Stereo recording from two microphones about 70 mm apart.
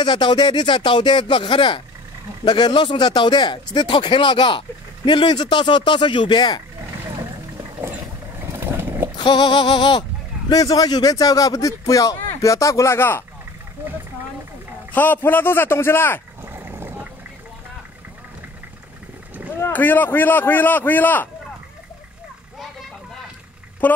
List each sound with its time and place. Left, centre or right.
0.0 s speech: left
2.4 s speech: left
8.7 s sheep: right
9.2 s speech: left
10.5 s speech: left
13.8 s speech: right
15.0 s a man's voice: left
16.4 s vehicle: right
19.6 s a man's voice: left
23.8 s a man's voice: left